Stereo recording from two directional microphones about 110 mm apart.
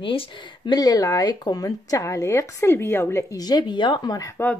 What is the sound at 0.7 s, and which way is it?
Speech, 35° left (ahead or behind).